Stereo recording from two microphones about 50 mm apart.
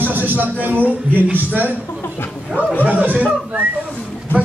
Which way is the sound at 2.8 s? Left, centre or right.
Right.